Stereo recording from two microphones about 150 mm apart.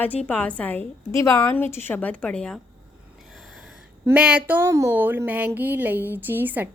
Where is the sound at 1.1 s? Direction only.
20° left (ahead or behind).